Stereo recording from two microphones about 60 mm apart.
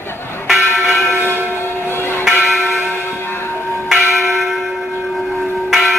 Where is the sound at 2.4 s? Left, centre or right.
Centre.